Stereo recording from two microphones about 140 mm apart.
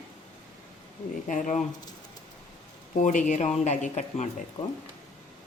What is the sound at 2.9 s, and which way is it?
Speech, 65° left (ahead or behind).